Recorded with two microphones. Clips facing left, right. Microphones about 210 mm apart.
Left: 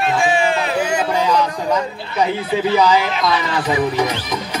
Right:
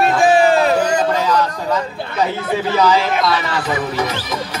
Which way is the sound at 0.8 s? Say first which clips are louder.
Right 2 dB; 10° left (ahead or behind).